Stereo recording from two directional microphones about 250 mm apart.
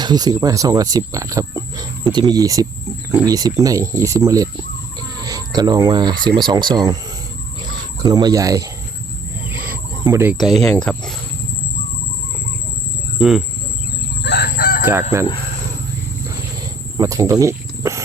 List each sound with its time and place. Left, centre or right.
0.0 s speech: centre
8.0 s speech: centre
9.5 s cricket: centre
10.3 s speech: centre
13.1 s speech: centre
14.3 s chicken: left
17.0 s speech: centre